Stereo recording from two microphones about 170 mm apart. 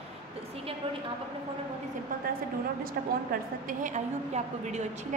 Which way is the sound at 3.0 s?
60° right (ahead or behind).